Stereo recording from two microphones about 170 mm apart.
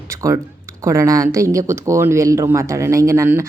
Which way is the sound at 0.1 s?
20° right (ahead or behind).